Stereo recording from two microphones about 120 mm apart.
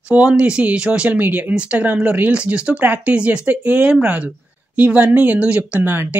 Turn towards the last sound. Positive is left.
turn(degrees=-15)  # may be behind; listen again after turning